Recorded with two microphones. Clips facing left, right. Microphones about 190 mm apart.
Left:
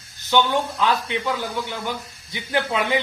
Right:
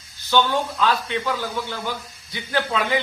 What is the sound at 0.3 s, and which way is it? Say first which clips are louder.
A man's voice: even; 15° left (ahead or behind).